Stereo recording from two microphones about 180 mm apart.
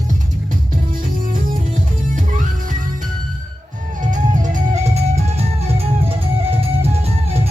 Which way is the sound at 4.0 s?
45° right (ahead or behind).